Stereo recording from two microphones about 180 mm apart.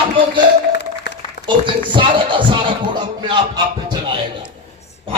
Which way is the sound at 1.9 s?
25° right (ahead or behind).